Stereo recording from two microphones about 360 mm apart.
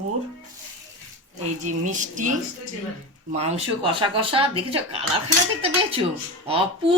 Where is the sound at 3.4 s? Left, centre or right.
Centre.